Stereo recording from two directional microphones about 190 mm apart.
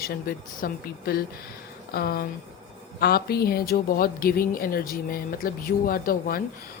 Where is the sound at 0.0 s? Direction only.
50° left (ahead or behind).